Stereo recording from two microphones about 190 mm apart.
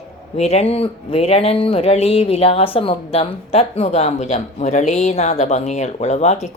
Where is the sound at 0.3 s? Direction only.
35° left (ahead or behind).